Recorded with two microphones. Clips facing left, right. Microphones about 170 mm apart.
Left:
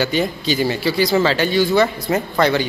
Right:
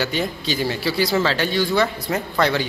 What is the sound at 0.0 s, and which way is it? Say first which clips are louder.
Speech: left 4 dB; centre (ahead or behind).